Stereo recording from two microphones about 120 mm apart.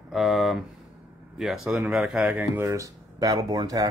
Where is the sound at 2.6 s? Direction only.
25° right (ahead or behind).